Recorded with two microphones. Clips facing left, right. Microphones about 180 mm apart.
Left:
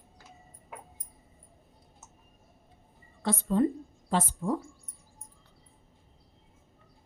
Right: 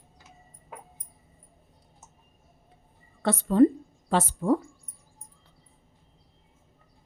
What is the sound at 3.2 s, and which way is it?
A woman's voice, 70° right (ahead or behind).